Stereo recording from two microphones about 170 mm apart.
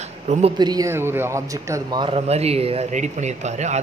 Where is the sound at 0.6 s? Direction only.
20° right (ahead or behind).